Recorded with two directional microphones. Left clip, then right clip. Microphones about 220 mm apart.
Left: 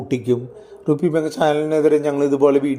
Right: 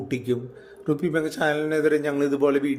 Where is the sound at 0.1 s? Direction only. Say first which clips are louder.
Left 7 dB; 25° left (ahead or behind).